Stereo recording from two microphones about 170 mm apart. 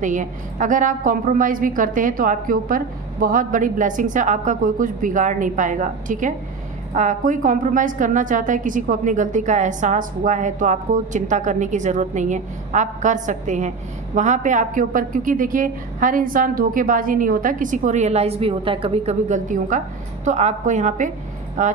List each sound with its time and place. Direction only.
0.0 s a woman's voice: 50° right (ahead or behind)